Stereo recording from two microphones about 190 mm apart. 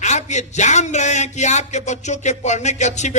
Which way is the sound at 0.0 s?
40° left (ahead or behind).